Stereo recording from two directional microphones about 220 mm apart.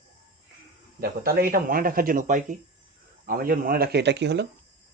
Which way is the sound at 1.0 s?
45° right (ahead or behind).